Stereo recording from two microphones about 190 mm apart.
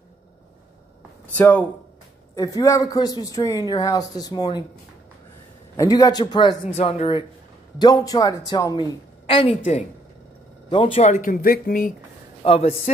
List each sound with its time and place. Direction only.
1.4 s speech: 10° left (ahead or behind)
5.8 s speech: 20° left (ahead or behind)
6.6 s a woman's voice: 35° left (ahead or behind)
10.7 s speech: 30° left (ahead or behind); by 11.9 s 50° left (ahead or behind)
12.4 s speech: 30° left (ahead or behind)